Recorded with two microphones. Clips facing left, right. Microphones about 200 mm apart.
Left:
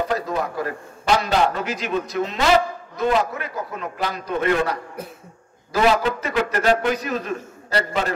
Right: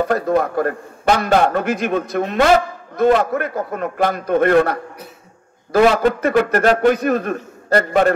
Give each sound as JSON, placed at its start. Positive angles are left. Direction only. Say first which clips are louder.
{"t": 0.0, "sound": "a man's voice", "louder": "right 7 dB", "side_deg": -55}